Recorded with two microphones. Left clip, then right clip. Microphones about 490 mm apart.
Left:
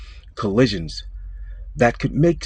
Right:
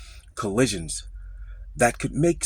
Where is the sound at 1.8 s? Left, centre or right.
Right.